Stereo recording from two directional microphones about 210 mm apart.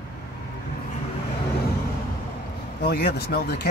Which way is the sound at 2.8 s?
50° left (ahead or behind).